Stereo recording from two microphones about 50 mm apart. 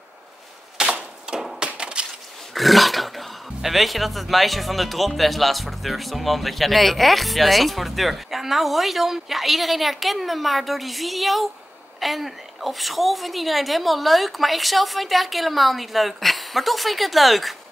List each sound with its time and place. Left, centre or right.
0.8 s a sound: centre
1.3 s wood: centre
2.5 s speech: centre